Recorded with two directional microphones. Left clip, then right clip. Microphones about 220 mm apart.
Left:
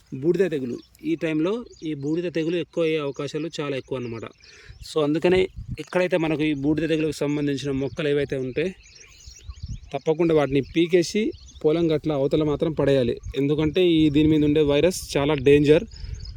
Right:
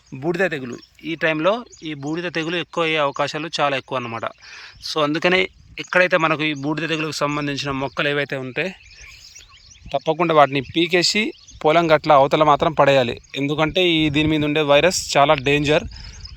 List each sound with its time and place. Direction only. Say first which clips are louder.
0.2 s speech: right 1 dB; 5° left (ahead or behind)
9.9 s speech: right 4 dB; 5° left (ahead or behind)
11.2 s speech: right 3 dB; 30° right (ahead or behind)
12.0 s speech: right 9 dB; 5° left (ahead or behind)